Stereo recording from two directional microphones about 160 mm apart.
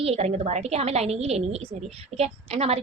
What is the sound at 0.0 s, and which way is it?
A woman's voice, 40° right (ahead or behind).